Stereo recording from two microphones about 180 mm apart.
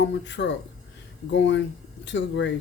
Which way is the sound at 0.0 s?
80° left.